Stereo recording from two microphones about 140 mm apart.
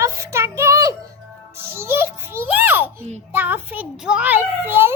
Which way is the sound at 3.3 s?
15° right (ahead or behind).